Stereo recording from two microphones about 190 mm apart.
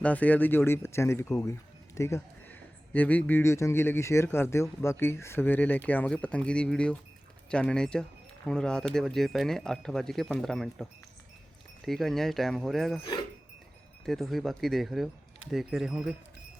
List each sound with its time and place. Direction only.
0.0 s speech: 10° left (ahead or behind)
14.0 s speech: centre (ahead or behind)